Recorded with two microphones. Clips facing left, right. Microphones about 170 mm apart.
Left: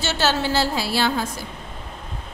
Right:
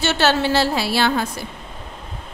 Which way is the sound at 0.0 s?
65° right (ahead or behind).